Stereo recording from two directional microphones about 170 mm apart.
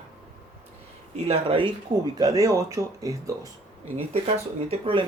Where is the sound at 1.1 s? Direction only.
35° right (ahead or behind).